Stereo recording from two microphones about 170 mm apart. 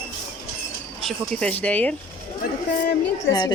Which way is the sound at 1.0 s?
5° left (ahead or behind).